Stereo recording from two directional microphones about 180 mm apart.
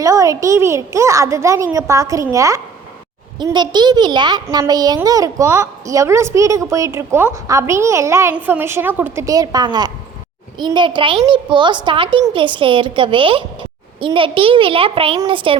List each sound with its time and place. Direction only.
0.0 s a child's voice: 20° right (ahead or behind)